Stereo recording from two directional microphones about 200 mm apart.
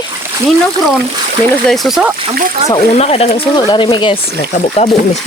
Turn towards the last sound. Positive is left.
turn(degrees=25)  # may be behind; listen again after turning